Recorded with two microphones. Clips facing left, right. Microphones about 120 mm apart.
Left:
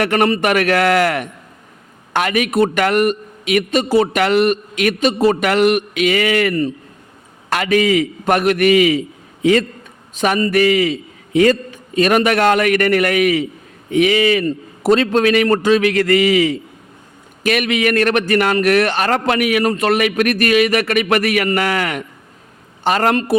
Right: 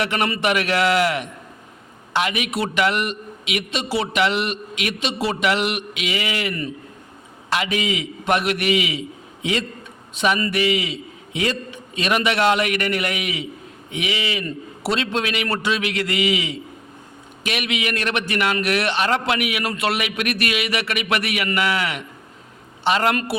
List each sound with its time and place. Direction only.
0.0 s a man's voice: 50° left (ahead or behind)